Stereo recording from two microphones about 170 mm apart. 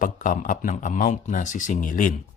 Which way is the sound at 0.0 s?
50° left (ahead or behind).